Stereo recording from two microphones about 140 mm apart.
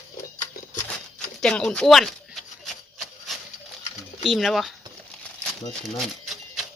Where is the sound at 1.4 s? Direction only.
5° left (ahead or behind).